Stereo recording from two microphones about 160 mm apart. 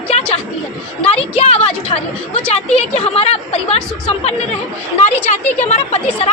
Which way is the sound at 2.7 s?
40° left (ahead or behind).